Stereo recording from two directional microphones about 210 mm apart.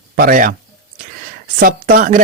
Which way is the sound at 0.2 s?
40° right (ahead or behind).